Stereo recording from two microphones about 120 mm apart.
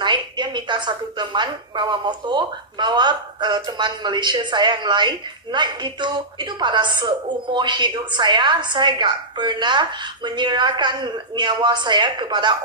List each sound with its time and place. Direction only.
0.0 s a woman's voice: 40° right (ahead or behind)